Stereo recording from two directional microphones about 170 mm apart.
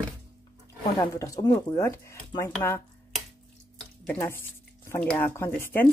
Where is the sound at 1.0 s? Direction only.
20° left (ahead or behind).